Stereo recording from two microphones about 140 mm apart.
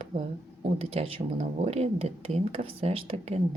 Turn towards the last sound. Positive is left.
turn(degrees=-45)  # may be behind; listen again after turning